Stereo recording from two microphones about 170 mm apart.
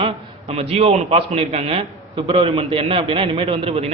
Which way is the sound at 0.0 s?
35° right (ahead or behind).